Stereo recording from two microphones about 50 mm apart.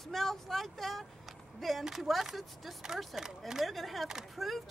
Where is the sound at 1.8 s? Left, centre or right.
Centre.